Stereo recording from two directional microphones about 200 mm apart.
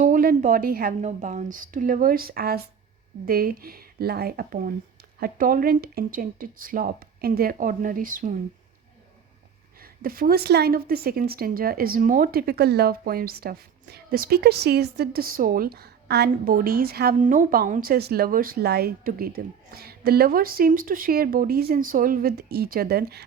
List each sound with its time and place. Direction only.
0.0 s a woman's voice: 40° right (ahead or behind)
9.8 s a woman's voice: 45° right (ahead or behind)